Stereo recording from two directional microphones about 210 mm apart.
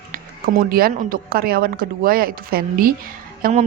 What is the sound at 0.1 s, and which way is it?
A woman's voice, 45° right (ahead or behind).